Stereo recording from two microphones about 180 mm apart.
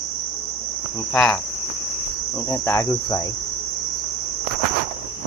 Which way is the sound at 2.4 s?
15° left (ahead or behind).